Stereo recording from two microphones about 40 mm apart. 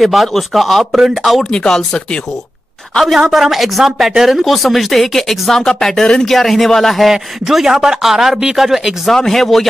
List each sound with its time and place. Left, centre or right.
0.0 s speech: centre
1.5 s speech: centre
3.2 s speech: centre
7.1 s speech: centre
9.1 s speech: centre